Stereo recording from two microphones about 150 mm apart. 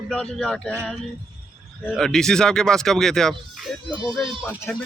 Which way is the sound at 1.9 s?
5° left (ahead or behind).